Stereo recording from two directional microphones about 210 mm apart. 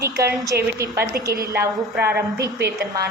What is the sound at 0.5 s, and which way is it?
Speech, 50° right (ahead or behind).